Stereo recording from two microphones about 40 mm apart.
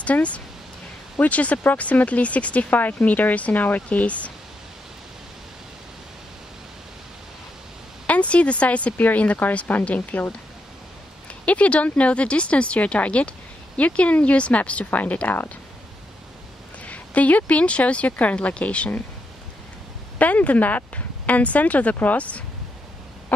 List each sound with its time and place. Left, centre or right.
0.0 s speech: left
3.9 s speech: left
8.1 s speech: left
11.4 s speech: left
14.9 s speech: left
16.8 s speech: left
20.2 s speech: left